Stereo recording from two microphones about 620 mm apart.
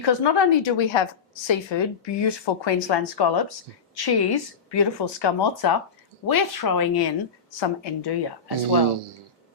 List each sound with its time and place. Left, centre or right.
0.0 s speech: left